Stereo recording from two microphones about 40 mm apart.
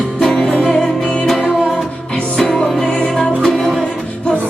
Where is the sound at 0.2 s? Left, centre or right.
Centre.